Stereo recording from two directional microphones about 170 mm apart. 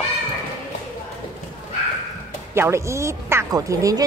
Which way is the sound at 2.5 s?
15° right (ahead or behind).